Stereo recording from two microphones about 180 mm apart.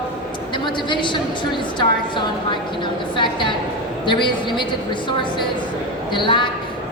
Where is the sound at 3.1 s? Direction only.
25° left (ahead or behind).